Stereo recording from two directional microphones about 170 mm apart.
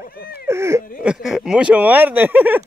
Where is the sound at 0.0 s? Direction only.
65° left (ahead or behind).